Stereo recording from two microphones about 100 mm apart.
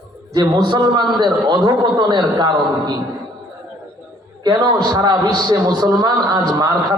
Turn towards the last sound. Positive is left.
turn(degrees=-45)  # may be behind; listen again after turning